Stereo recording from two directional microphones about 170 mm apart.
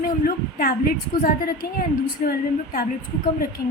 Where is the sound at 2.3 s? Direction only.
60° left (ahead or behind).